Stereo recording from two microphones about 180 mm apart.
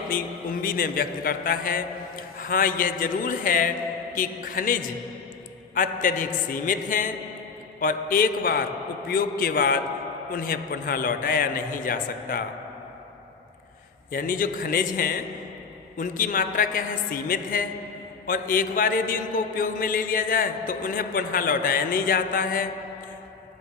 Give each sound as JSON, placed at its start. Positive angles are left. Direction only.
{"t": 0.6, "sound": "a man's voice", "side_deg": 55}
{"t": 14.1, "sound": "a man's voice", "side_deg": 50}